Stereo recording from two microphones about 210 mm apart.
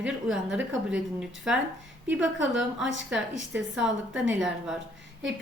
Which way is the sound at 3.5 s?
5° right (ahead or behind).